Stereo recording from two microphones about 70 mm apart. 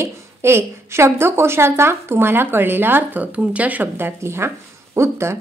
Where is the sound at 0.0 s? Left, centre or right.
Right.